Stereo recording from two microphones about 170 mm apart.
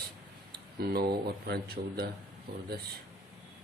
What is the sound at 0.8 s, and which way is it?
Speech, 70° right (ahead or behind).